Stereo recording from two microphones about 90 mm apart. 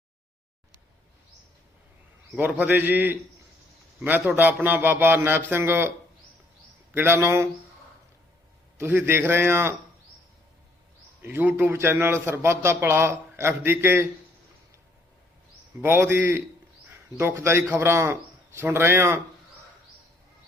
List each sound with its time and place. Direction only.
2.4 s a man's voice: 15° right (ahead or behind)
6.9 s a man's voice: 25° right (ahead or behind)
8.8 s a man's voice: 25° right (ahead or behind)
11.2 s a man's voice: 25° right (ahead or behind)
15.8 s a man's voice: 25° right (ahead or behind)